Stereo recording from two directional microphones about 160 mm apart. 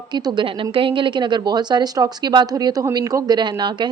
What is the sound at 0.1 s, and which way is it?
A woman's voice, 30° right (ahead or behind).